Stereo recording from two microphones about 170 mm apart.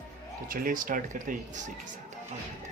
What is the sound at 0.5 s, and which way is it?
Speech, 55° right (ahead or behind).